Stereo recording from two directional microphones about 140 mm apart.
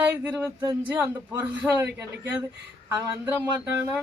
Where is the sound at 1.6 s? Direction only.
15° right (ahead or behind).